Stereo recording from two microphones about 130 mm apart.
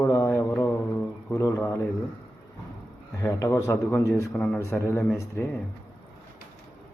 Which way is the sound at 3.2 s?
25° left (ahead or behind).